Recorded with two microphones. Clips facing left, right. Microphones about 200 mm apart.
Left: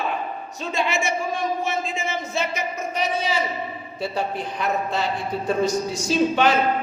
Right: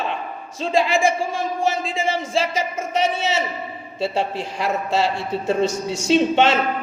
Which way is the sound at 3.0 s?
25° right (ahead or behind).